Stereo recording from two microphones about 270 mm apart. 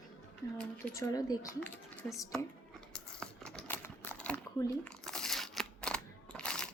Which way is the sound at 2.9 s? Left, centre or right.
Centre.